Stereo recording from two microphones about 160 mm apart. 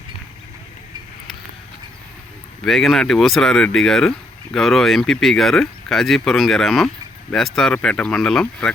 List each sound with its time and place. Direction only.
2.6 s speech: centre (ahead or behind)